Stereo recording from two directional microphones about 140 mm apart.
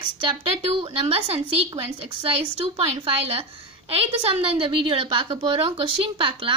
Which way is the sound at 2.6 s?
45° right (ahead or behind).